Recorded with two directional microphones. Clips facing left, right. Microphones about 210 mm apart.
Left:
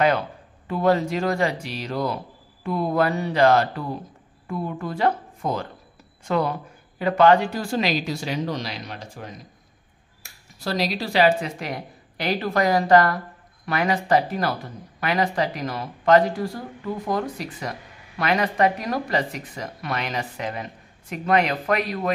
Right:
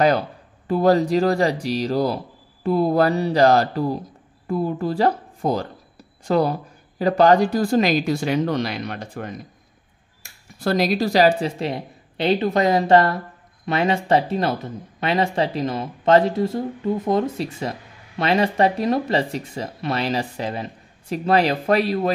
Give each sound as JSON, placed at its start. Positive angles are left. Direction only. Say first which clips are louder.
{"t": 0.7, "sound": "a woman's voice", "louder": "right 4 dB", "side_deg": -35}
{"t": 10.6, "sound": "speech", "louder": "right 6 dB", "side_deg": -50}